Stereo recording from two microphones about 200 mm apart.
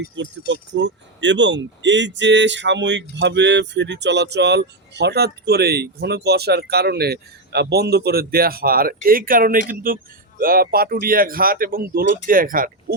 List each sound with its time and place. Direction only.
0.2 s speech: 65° right (ahead or behind); by 13.0 s 45° right (ahead or behind)